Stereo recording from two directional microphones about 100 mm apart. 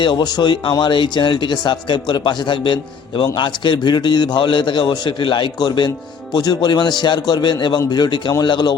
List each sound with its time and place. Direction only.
0.0 s speech: 50° left (ahead or behind)